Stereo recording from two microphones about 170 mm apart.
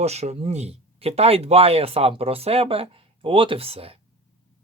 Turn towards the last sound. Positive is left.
turn(degrees=-35)  # may be behind; listen again after turning